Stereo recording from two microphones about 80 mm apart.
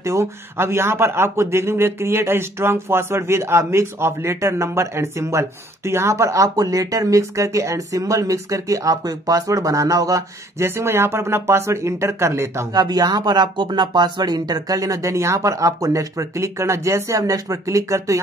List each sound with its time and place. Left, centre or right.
0.0 s speech: right
12.7 s speech: right